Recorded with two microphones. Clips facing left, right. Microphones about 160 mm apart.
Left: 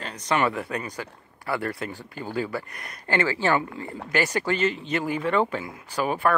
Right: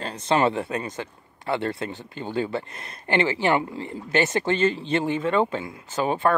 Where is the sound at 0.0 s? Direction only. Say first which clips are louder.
Right 3 dB; 30° right (ahead or behind).